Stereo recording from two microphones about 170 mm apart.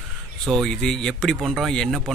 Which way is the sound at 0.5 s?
Centre (ahead or behind).